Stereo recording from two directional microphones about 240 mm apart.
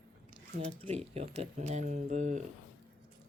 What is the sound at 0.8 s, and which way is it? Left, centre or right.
Speech, right.